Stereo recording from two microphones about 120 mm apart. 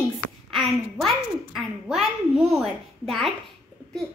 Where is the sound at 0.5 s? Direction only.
Centre (ahead or behind).